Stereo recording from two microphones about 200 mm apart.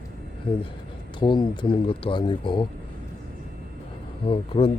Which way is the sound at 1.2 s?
20° left (ahead or behind).